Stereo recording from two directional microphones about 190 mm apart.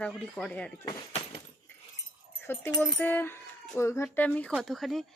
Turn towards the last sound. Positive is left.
turn(degrees=0)  # may be behind; listen again after turning